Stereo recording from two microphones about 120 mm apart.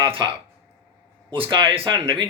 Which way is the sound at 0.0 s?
45° right (ahead or behind).